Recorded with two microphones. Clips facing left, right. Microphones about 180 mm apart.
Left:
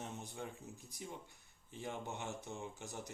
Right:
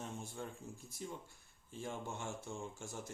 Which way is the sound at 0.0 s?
20° left (ahead or behind).